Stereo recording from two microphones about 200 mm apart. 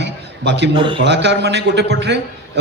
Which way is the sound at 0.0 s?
60° right (ahead or behind).